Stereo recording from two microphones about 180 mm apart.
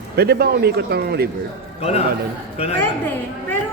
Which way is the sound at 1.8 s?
35° left (ahead or behind).